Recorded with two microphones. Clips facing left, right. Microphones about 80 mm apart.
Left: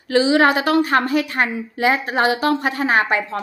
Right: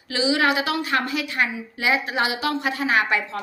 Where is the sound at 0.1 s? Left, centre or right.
Left.